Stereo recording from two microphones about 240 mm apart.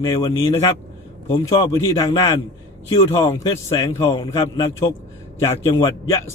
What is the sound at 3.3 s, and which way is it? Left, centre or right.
A man's voice, centre.